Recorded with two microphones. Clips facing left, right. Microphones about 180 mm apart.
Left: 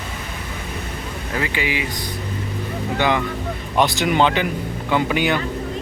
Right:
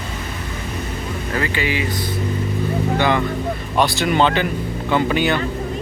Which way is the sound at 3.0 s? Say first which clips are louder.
Left 1 dB; 15° left (ahead or behind).